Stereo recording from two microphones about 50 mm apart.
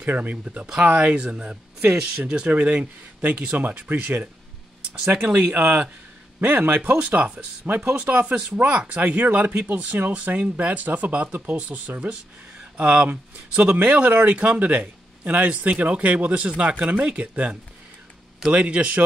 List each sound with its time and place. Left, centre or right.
0.0 s speech: right
0.9 s speech: right
7.0 s speech: right
7.6 s speech: right